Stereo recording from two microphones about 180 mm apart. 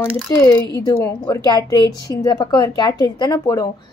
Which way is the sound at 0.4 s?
15° left (ahead or behind).